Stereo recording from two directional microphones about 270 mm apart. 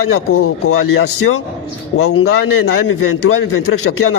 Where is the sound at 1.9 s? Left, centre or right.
Left.